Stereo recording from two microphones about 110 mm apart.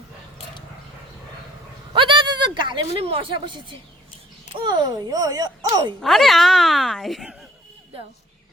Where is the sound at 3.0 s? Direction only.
55° right (ahead or behind); by 5.8 s 35° right (ahead or behind).